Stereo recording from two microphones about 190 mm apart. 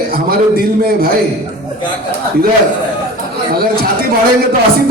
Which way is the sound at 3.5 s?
50° right (ahead or behind).